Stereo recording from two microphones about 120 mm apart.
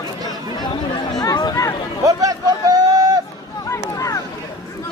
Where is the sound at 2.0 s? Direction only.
30° right (ahead or behind).